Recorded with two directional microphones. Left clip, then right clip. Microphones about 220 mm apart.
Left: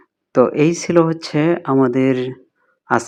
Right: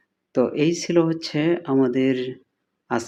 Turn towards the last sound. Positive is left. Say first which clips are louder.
# left 8 dB
turn(degrees=20)  # may be behind; listen again after turning